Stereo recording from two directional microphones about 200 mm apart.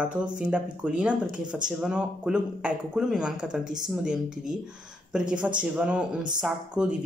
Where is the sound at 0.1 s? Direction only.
5° right (ahead or behind).